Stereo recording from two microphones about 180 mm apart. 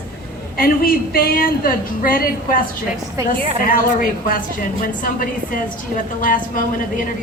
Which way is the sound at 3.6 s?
50° left (ahead or behind).